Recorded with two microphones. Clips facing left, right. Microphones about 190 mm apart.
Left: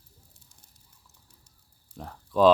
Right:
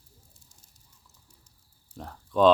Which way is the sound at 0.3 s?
60° left (ahead or behind).